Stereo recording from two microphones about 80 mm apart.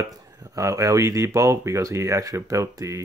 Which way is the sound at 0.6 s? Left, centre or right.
Right.